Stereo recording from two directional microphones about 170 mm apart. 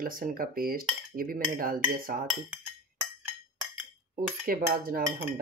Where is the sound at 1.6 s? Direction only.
55° right (ahead or behind).